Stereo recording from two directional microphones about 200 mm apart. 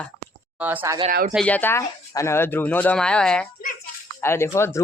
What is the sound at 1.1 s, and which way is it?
Speech, 45° right (ahead or behind).